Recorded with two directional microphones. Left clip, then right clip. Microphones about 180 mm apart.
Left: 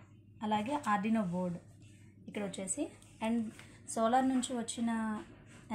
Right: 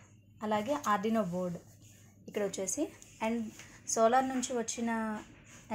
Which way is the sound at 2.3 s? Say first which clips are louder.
Right 6 dB; 35° right (ahead or behind).